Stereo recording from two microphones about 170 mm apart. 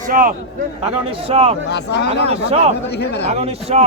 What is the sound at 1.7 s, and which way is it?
Speech, 80° left.